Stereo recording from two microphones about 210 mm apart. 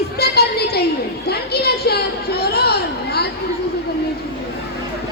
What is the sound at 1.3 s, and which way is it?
Children playing, 50° left (ahead or behind).